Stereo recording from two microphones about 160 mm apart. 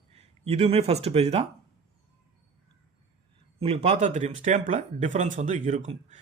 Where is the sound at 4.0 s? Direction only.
50° right (ahead or behind).